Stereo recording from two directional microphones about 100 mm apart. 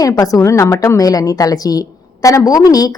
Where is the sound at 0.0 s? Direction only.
35° left (ahead or behind).